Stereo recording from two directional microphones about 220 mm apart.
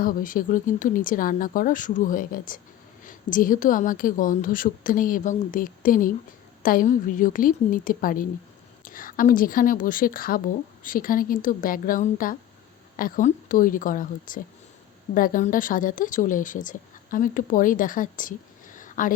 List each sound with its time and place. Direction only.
0.0 s speech: 40° left (ahead or behind)